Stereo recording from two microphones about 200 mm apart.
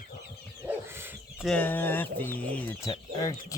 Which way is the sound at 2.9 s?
20° left (ahead or behind).